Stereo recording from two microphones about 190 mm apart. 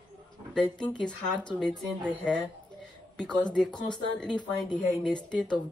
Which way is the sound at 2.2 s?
5° left (ahead or behind).